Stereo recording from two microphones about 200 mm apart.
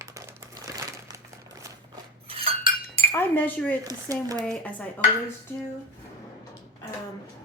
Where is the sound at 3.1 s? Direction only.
10° left (ahead or behind).